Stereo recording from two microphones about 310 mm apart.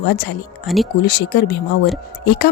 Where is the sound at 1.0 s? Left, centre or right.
Left.